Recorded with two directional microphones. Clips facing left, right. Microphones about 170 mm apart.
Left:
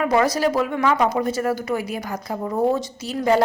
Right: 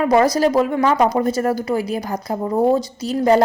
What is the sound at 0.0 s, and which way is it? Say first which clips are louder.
A woman's voice: right 4 dB; 35° right (ahead or behind).